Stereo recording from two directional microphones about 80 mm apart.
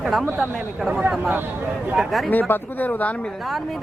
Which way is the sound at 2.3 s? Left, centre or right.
Left.